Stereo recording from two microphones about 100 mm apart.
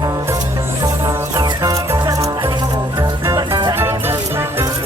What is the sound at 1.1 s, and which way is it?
Music, 30° right (ahead or behind).